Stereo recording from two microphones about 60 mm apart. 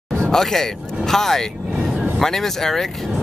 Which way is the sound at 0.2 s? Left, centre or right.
Centre.